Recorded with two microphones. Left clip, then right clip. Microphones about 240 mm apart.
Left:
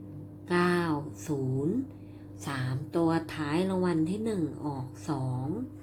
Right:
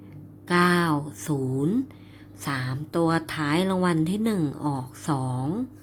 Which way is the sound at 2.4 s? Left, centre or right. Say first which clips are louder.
Right 6 dB; right.